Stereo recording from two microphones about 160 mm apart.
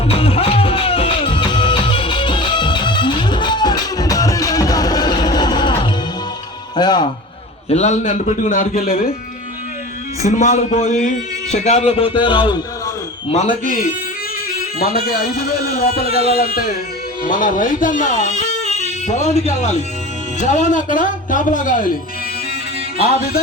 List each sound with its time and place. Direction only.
0.1 s music: 35° left (ahead or behind)
7.7 s speech: 45° left (ahead or behind); by 9.0 s 65° left (ahead or behind)
10.2 s a man's voice: 50° left (ahead or behind); by 12.5 s 30° left (ahead or behind)
13.3 s speech: 50° left (ahead or behind)
14.8 s a man's voice: 70° left (ahead or behind)
17.2 s speech: 60° left (ahead or behind)
23.0 s a man's voice: 70° left (ahead or behind)